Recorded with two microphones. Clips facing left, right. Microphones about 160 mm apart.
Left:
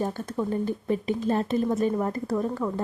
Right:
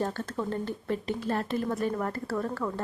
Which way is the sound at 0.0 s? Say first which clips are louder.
Left 3 dB; 15° left (ahead or behind).